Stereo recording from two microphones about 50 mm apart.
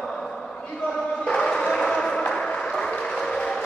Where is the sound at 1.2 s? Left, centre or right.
Centre.